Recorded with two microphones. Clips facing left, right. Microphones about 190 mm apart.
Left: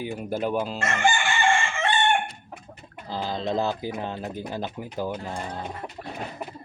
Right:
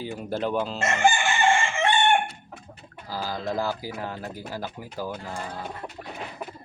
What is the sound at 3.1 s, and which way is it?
Speech, 20° left (ahead or behind).